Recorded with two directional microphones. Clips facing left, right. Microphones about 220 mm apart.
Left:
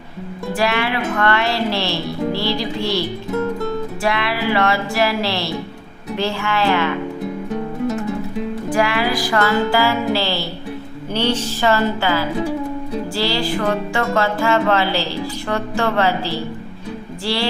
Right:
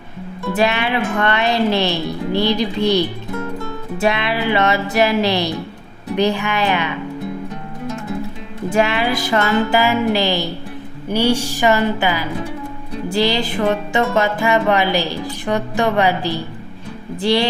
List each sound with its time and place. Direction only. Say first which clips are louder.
0.5 s speech: right 2 dB; 20° right (ahead or behind)
4.0 s speech: right 3 dB; 20° right (ahead or behind)
6.1 s music: right 3 dB; 15° right (ahead or behind)
8.7 s speech: right 2 dB; 20° right (ahead or behind)
11.1 s music: right 3 dB; 10° right (ahead or behind)